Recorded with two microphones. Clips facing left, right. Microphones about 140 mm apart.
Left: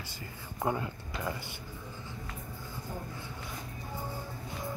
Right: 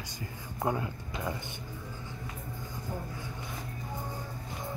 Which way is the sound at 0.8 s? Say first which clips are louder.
Right 1 dB; 15° right (ahead or behind).